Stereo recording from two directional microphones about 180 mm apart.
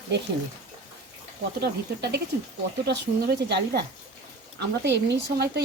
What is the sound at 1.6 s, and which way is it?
Speech, 65° right (ahead or behind).